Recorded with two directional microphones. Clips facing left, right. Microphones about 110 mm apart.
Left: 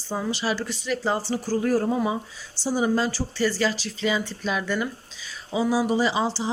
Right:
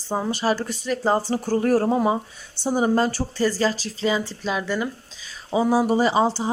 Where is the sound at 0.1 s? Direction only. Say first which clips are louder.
Right 4 dB; 45° right (ahead or behind).